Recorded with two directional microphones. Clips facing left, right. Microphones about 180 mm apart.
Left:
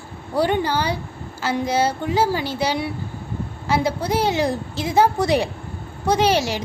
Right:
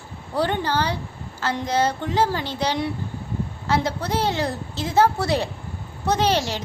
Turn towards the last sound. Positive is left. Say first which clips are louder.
# left 3 dB
turn(degrees=10)  # may be behind; listen again after turning